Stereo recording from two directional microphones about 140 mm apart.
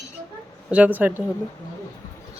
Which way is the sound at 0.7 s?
10° right (ahead or behind).